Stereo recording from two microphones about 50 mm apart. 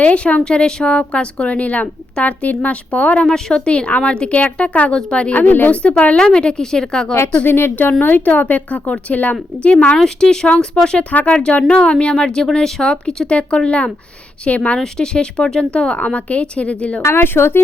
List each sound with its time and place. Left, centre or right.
0.0 s speech: left
0.4 s speech: centre
3.2 s speech: centre
5.3 s a woman's voice: left
5.9 s a woman's voice: centre
7.4 s a woman's voice: left
10.0 s a woman's voice: centre
12.8 s a woman's voice: centre
17.0 s a woman's voice: left